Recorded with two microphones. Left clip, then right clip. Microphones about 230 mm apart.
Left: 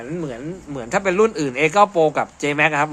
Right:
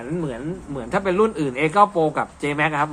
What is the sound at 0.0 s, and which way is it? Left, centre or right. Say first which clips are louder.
A man's voice: even; left.